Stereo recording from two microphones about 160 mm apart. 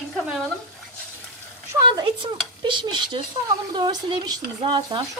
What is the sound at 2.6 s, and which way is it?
Speech, 30° right (ahead or behind).